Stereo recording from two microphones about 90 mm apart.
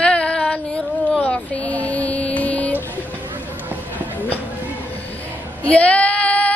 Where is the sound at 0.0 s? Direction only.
15° left (ahead or behind).